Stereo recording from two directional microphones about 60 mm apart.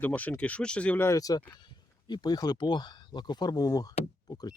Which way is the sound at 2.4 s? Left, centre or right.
Left.